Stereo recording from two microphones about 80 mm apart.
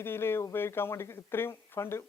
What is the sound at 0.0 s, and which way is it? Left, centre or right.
Speech, left.